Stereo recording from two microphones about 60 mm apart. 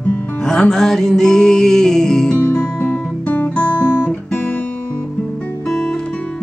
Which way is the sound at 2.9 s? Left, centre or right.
Left.